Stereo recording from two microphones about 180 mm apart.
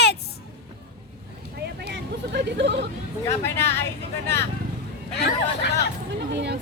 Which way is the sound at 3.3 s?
15° left (ahead or behind).